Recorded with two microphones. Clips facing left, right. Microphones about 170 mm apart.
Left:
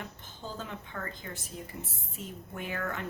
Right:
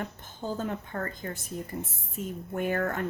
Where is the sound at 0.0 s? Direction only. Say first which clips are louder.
Right 7 dB; 50° right (ahead or behind).